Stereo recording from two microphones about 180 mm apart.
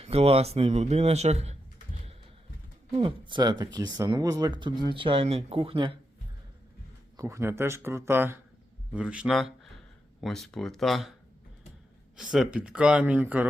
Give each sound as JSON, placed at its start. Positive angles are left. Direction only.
{"t": 0.0, "sound": "speech", "side_deg": -35}
{"t": 2.9, "sound": "speech", "side_deg": -30}
{"t": 7.2, "sound": "speech", "side_deg": -15}
{"t": 12.1, "sound": "speech", "side_deg": -5}